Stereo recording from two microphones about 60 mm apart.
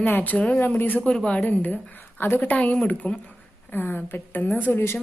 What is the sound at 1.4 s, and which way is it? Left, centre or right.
A woman's voice, left.